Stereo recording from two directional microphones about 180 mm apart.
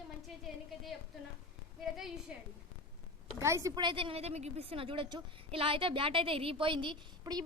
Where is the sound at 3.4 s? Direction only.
15° right (ahead or behind).